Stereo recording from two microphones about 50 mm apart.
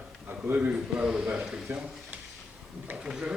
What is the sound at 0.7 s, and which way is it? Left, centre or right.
Speech, centre.